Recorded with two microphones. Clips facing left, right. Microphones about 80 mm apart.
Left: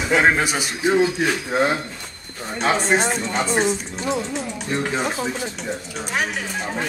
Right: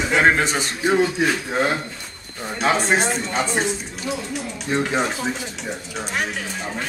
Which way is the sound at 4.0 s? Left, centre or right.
Left.